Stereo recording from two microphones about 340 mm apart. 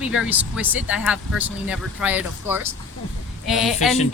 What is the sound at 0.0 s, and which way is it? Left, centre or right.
Speech, centre.